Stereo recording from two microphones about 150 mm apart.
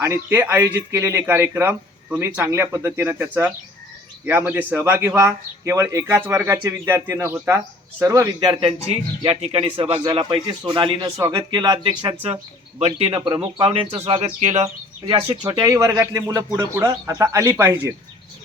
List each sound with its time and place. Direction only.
0.0 s speech: 20° right (ahead or behind)
4.3 s speech: 10° right (ahead or behind); by 8.7 s 30° right (ahead or behind)
9.4 s speech: 40° right (ahead or behind)
13.2 s speech: 30° right (ahead or behind); by 14.7 s 50° right (ahead or behind)
15.0 s speech: 35° right (ahead or behind)
15.6 s speech: 20° right (ahead or behind)